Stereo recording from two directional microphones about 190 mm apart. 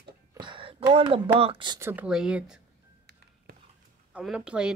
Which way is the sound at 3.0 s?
60° right (ahead or behind).